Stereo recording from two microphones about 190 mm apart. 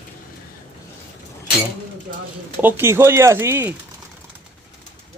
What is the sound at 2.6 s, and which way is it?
Speech, 15° right (ahead or behind).